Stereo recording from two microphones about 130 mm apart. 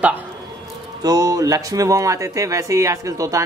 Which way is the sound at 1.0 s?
30° right (ahead or behind).